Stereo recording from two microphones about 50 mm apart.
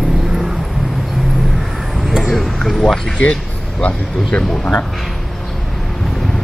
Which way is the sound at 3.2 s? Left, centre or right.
Left.